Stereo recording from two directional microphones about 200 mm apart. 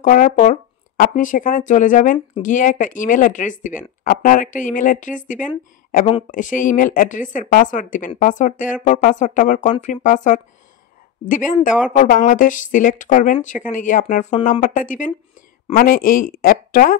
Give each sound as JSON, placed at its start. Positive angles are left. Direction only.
{"t": 0.0, "sound": "a woman's voice", "side_deg": 40}